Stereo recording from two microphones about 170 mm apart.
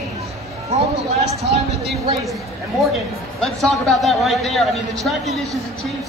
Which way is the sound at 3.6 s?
Centre (ahead or behind).